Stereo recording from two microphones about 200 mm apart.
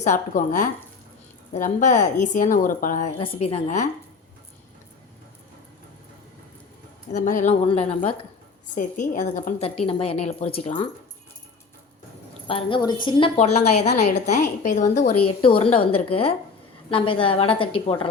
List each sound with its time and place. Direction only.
0.0 s a woman's voice: 40° left (ahead or behind)
3.2 s a woman's voice: 30° left (ahead or behind)
7.1 s a woman's voice: 40° left (ahead or behind)
8.6 s a woman's voice: 40° left (ahead or behind)
12.5 s a woman's voice: 25° left (ahead or behind)
13.3 s a woman's voice: 35° left (ahead or behind)
15.4 s a woman's voice: 25° left (ahead or behind)